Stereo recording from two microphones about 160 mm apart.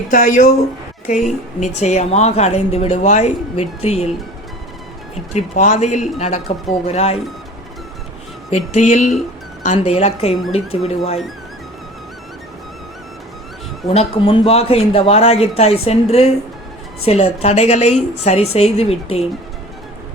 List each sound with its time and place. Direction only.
0.1 s speech: 55° left (ahead or behind)
1.5 s a woman's voice: 45° left (ahead or behind)
5.3 s a woman's voice: 50° left (ahead or behind)
8.4 s a woman's voice: 45° left (ahead or behind)
13.8 s speech: 40° left (ahead or behind)